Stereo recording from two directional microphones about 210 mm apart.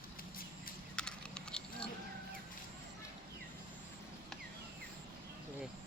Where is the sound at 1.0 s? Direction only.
5° left (ahead or behind).